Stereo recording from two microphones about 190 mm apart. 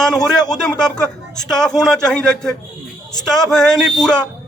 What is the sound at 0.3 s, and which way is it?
A man's voice, 5° left (ahead or behind).